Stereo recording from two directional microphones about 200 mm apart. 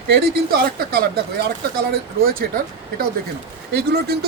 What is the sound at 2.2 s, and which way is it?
Speech, 45° right (ahead or behind).